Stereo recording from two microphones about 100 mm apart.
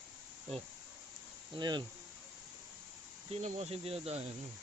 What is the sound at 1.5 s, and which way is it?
Insect, 50° right (ahead or behind).